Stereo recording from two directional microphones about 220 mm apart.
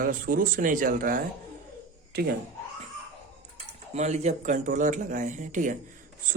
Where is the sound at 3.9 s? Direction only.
30° right (ahead or behind).